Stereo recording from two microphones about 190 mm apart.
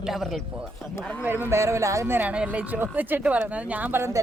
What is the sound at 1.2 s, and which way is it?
A woman's voice, 10° right (ahead or behind).